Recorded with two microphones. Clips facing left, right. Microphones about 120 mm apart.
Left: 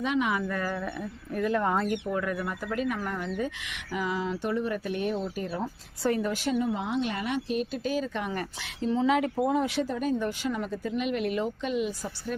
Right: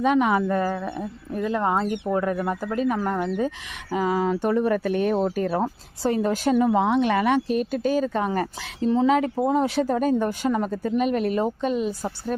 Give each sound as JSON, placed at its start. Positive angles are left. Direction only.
{"t": 0.0, "sound": "a woman's voice", "side_deg": -45}
{"t": 6.0, "sound": "a woman's voice", "side_deg": -30}
{"t": 6.3, "sound": "a woman's voice", "side_deg": -45}
{"t": 6.6, "sound": "speech", "side_deg": -65}
{"t": 7.4, "sound": "a woman's voice", "side_deg": -45}